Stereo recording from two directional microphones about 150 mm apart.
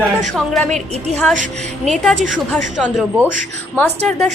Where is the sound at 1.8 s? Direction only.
Centre (ahead or behind).